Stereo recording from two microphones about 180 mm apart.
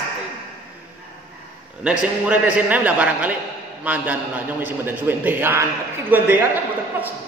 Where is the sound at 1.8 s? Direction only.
5° right (ahead or behind).